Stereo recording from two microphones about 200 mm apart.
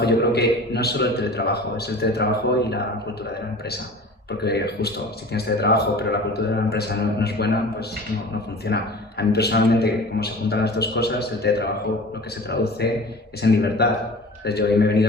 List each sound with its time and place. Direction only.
0.0 s a man's voice: 55° left (ahead or behind)
4.3 s a man's voice: 55° left (ahead or behind)
8.6 s a man's voice: 55° left (ahead or behind)